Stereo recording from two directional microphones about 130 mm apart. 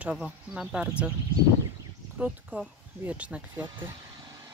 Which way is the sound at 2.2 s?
10° right (ahead or behind).